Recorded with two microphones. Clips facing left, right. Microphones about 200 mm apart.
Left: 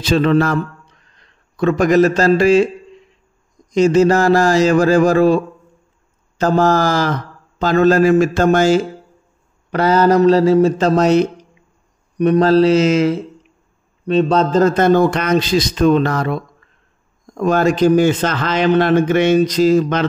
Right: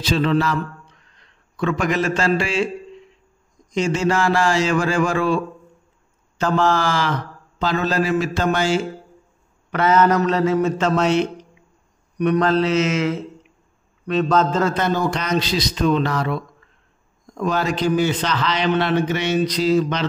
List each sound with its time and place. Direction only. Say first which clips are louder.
0.0 s a man's voice: left 5 dB; 50° left (ahead or behind)
1.6 s speech: left 8 dB; 40° left (ahead or behind)
3.7 s a man's voice: left 8 dB; 40° left (ahead or behind)
17.4 s a man's voice: left 7 dB; 50° left (ahead or behind)